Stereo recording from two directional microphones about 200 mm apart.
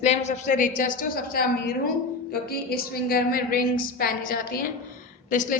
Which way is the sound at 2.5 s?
50° left (ahead or behind).